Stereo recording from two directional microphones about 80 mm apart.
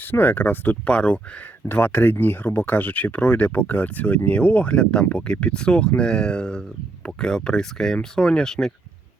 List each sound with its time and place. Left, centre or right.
0.0 s speech: left
1.6 s speech: left; by 8.7 s centre